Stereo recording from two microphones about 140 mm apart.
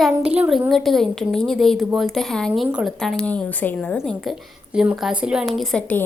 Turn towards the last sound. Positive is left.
turn(degrees=10)  # may be behind; listen again after turning